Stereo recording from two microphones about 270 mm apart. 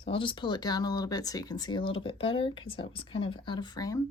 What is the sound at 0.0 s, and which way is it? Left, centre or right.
Speech, centre.